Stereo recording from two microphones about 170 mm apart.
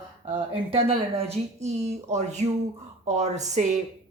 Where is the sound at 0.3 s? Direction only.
35° right (ahead or behind).